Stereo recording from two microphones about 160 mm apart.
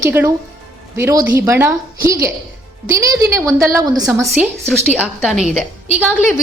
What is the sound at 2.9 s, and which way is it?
A woman's voice, 20° right (ahead or behind).